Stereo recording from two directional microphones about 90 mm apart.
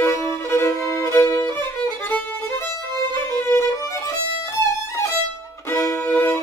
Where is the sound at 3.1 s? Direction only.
25° left (ahead or behind).